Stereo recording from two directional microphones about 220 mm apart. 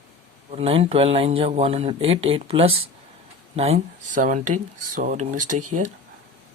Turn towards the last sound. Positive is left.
turn(degrees=-35)  # may be behind; listen again after turning